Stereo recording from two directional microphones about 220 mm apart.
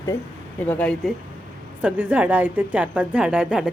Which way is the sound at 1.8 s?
5° right (ahead or behind).